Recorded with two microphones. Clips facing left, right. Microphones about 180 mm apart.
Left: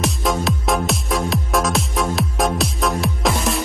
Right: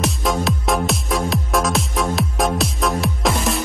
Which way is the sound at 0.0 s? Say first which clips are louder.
Even; centre (ahead or behind).